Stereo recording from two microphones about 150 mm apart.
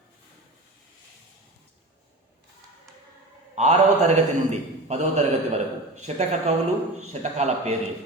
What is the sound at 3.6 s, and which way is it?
A man's voice, 50° right (ahead or behind).